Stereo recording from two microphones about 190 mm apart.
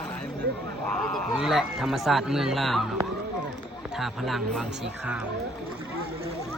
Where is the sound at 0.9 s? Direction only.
Centre (ahead or behind).